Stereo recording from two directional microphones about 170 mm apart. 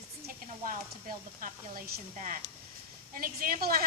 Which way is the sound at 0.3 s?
50° right (ahead or behind).